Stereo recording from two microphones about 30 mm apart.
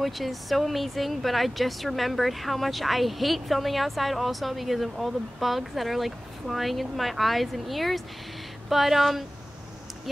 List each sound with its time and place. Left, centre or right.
0.0 s speech: centre